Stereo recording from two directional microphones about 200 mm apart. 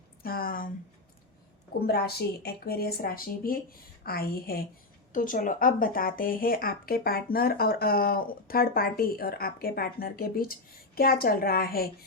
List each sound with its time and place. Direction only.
0.2 s speech: 50° left (ahead or behind)
1.9 s speech: 50° left (ahead or behind)